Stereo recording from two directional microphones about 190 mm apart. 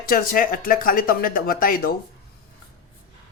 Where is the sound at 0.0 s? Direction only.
50° left (ahead or behind).